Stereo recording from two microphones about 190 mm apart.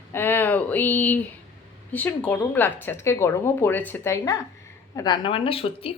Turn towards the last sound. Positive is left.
turn(degrees=30)  # may be behind; listen again after turning